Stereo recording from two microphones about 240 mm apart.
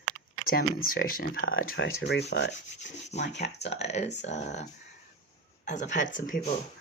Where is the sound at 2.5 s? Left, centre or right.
Left.